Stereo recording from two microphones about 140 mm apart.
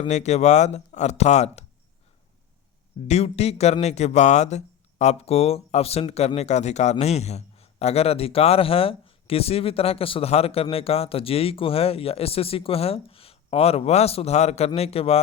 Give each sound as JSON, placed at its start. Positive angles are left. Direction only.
{"t": 0.1, "sound": "a man's voice", "side_deg": 55}
{"t": 3.1, "sound": "a man's voice", "side_deg": 50}